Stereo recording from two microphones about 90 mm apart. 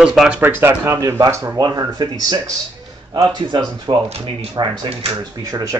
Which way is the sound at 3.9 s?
70° right (ahead or behind).